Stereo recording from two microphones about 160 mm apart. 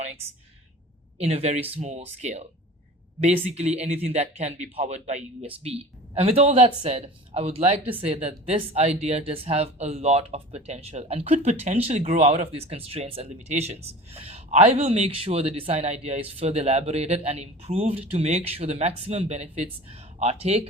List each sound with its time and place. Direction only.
1.2 s speech: 40° right (ahead or behind)